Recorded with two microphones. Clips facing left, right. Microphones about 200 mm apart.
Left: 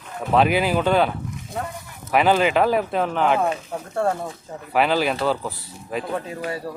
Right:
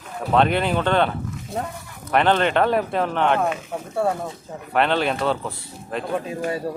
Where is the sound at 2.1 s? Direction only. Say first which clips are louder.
Left 1 dB; 5° left (ahead or behind).